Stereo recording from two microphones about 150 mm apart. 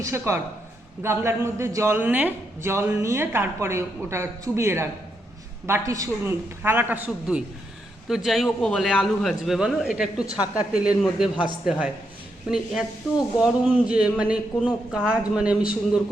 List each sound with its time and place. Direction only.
0.0 s a man's voice: 20° right (ahead or behind)
12.5 s a man's voice: 5° right (ahead or behind)